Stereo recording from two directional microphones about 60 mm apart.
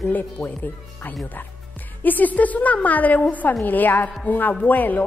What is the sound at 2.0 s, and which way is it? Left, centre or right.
A woman's voice, left.